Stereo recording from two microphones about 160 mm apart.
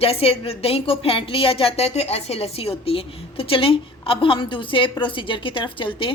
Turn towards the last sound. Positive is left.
turn(degrees=30)  # may be behind; listen again after turning